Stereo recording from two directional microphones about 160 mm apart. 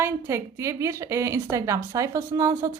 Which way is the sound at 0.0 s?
15° right (ahead or behind).